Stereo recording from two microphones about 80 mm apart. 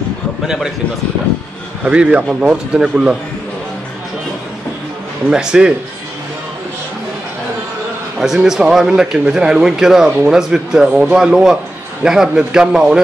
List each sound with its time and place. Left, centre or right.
1.9 s speech: centre
5.3 s speech: centre
8.2 s speech: centre
10.0 s speech: centre
10.3 s speech: centre